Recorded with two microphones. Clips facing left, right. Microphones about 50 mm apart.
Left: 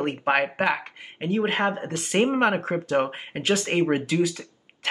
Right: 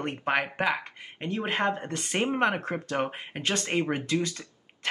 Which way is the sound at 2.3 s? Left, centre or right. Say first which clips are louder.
Left 4 dB; centre.